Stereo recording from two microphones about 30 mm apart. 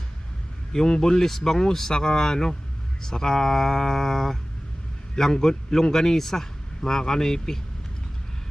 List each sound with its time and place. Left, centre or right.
0.7 s speech: centre